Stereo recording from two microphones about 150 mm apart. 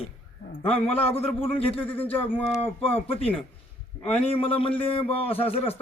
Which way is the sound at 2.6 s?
40° left (ahead or behind).